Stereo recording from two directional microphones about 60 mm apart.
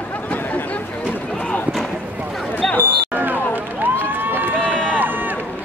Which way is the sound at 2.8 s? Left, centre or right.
Right.